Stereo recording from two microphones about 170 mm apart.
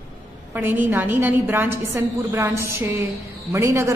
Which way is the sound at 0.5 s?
10° right (ahead or behind).